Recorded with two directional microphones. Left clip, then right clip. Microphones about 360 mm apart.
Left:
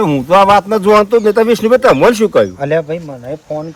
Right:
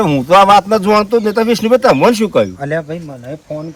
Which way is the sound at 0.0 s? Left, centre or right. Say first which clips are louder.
Even; centre.